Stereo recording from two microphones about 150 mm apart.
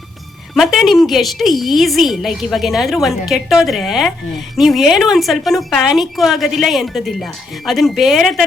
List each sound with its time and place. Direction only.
0.5 s a woman's voice: centre (ahead or behind)